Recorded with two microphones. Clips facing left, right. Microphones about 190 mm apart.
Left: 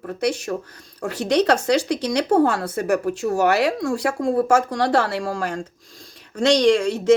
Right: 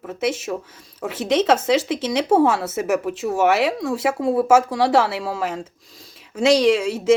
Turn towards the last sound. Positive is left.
turn(degrees=-5)  # may be behind; listen again after turning